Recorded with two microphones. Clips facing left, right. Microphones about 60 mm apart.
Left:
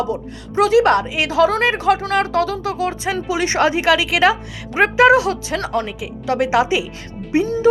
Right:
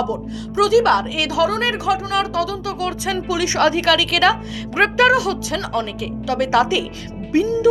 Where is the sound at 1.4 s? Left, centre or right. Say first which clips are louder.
Left 4 dB; left.